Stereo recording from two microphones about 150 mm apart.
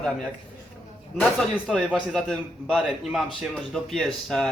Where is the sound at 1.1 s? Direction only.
5° left (ahead or behind).